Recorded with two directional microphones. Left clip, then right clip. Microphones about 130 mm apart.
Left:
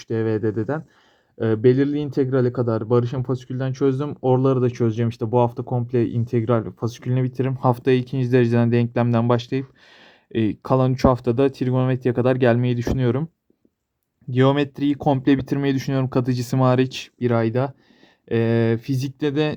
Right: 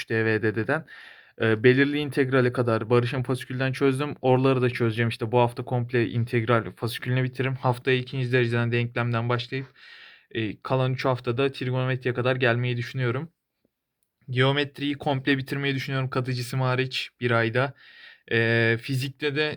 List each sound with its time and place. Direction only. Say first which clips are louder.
0.1 s speech: left 2 dB; 10° left (ahead or behind)
1.6 s speech: left 3 dB; 10° left (ahead or behind)
2.2 s speech: left 1 dB; 20° right (ahead or behind)
2.9 s speech: left 2 dB; 5° left (ahead or behind)
4.6 s speech: left 3 dB; 20° left (ahead or behind)
7.9 s speech: left 5 dB; 45° left (ahead or behind); by 13.2 s 65° left (ahead or behind)
14.3 s speech: left 5 dB; 65° left (ahead or behind)
16.1 s speech: left 7 dB; 80° left
17.2 s speech: left 3 dB; 40° left (ahead or behind)